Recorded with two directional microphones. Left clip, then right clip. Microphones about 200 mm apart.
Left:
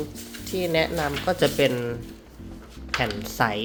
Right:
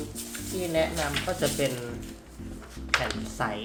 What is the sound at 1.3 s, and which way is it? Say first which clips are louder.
Speech: left 10 dB; 50° left (ahead or behind).